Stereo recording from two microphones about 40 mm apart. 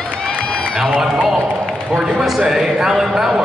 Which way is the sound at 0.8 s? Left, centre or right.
Centre.